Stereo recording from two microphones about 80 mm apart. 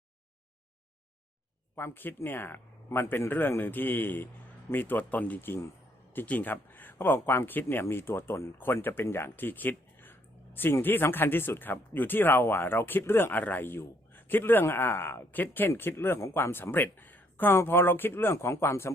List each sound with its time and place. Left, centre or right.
1.7 s speech: left